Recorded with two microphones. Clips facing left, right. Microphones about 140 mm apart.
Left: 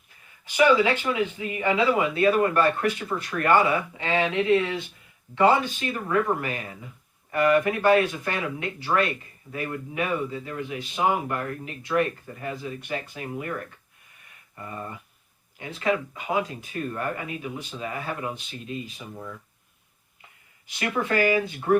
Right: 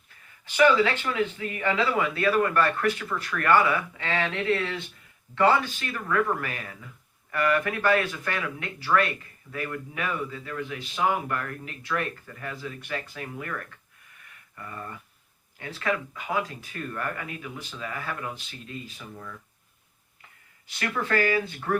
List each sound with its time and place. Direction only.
0.4 s speech: 15° left (ahead or behind)
20.7 s speech: 20° left (ahead or behind)